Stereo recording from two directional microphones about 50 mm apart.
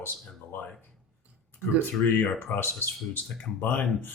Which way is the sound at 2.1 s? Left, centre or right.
Left.